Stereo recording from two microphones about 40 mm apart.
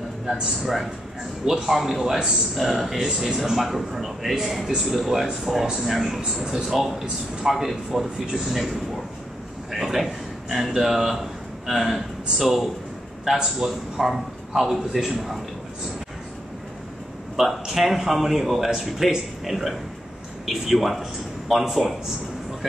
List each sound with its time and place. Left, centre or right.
1.4 s speech: centre
1.8 s a man's voice: centre
9.7 s a sound: centre
10.8 s speech: centre
17.4 s speech: centre